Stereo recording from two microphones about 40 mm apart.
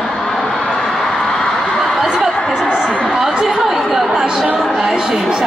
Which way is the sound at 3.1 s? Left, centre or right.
Centre.